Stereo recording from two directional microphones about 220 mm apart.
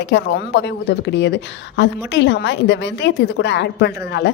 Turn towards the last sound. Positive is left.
turn(degrees=50)  # may be behind; listen again after turning